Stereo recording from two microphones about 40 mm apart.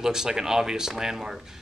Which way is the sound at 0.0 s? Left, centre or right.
Centre.